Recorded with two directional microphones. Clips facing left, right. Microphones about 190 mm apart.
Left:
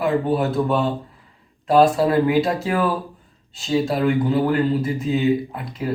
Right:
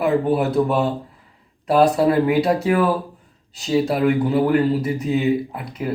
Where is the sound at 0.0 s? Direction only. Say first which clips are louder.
Right 2 dB; 5° right (ahead or behind).